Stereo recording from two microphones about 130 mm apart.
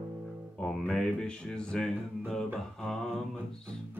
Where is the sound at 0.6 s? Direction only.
5° left (ahead or behind).